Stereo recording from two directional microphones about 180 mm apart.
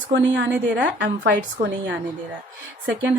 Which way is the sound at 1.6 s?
25° right (ahead or behind).